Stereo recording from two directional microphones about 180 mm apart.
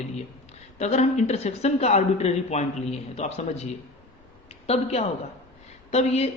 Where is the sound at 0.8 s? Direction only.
35° left (ahead or behind).